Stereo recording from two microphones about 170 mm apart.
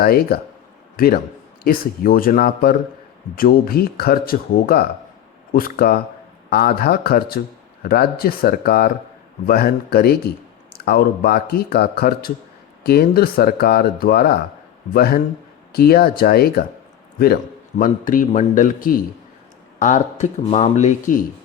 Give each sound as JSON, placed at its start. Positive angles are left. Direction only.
{"t": 0.0, "sound": "a man's voice", "side_deg": 60}